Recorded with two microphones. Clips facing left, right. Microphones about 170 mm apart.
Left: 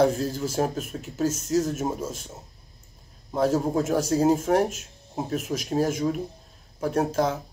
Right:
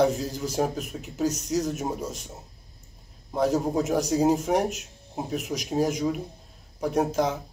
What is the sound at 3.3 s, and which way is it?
Speech, 15° right (ahead or behind).